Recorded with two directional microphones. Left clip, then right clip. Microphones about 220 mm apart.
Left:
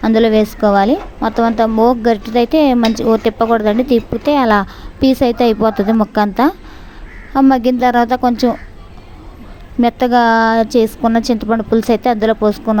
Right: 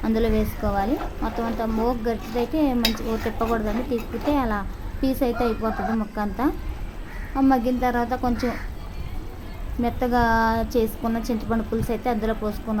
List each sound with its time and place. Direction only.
0.0 s a woman's voice: 35° left (ahead or behind)
9.8 s a woman's voice: 35° left (ahead or behind)